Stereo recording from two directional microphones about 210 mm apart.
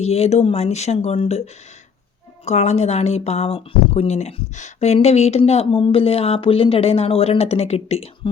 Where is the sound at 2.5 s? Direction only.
30° left (ahead or behind).